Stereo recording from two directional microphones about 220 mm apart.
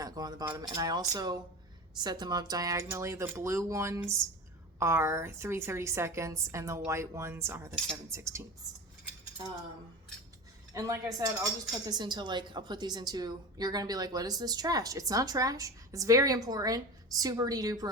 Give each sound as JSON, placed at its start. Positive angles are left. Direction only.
{"t": 0.0, "sound": "a woman's voice", "side_deg": -15}
{"t": 10.8, "sound": "a woman's voice", "side_deg": -15}